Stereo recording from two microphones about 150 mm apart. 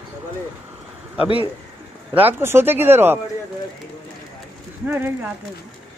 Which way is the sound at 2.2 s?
15° right (ahead or behind).